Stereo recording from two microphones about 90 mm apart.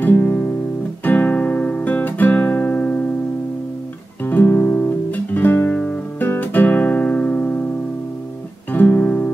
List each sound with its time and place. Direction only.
0.0 s music: 20° left (ahead or behind)
1.0 s guitar: 15° left (ahead or behind)
4.2 s music: 20° left (ahead or behind)
5.7 s guitar: 20° left (ahead or behind)
8.7 s guitar: 20° left (ahead or behind)